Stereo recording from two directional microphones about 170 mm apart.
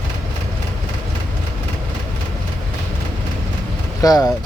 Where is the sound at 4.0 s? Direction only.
20° left (ahead or behind).